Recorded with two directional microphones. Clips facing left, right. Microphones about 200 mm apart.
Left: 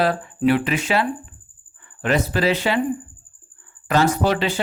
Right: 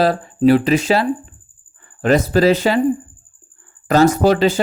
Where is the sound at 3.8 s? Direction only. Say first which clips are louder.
Right 6 dB; 40° right (ahead or behind).